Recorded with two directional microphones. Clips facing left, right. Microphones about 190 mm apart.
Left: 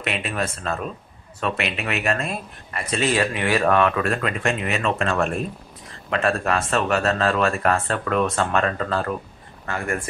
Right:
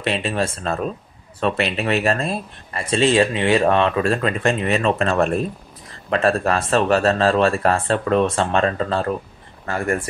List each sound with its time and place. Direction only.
0.0 s speech: 30° right (ahead or behind)